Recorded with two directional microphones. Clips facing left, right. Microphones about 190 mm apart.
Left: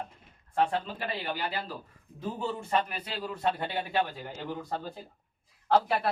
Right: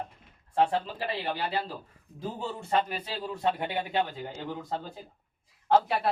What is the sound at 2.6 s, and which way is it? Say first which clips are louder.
Speech: right 4 dB; 25° right (ahead or behind).